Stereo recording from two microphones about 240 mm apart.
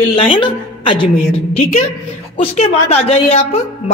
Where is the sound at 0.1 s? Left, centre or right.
Left.